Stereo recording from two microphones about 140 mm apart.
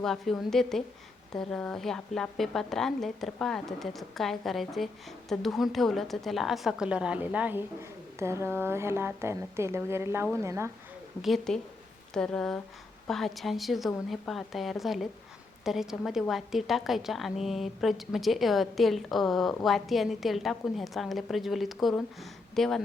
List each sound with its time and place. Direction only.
0.0 s a woman's voice: centre (ahead or behind); by 10.7 s 20° right (ahead or behind)
11.2 s a woman's voice: centre (ahead or behind)